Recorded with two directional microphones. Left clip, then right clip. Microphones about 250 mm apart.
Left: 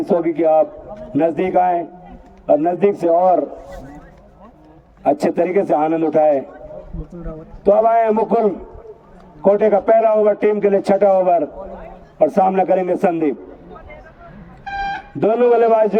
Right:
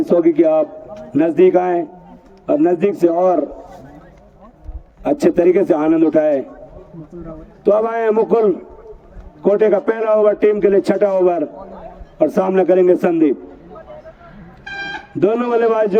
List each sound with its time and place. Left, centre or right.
0.3 s a man's voice: centre
5.0 s a man's voice: centre
7.6 s a man's voice: centre
9.5 s a man's voice: centre
14.6 s a sound: right
15.2 s a man's voice: centre